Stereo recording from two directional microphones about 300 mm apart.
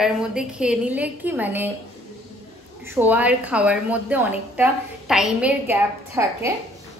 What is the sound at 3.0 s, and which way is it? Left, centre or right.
A woman's voice, centre.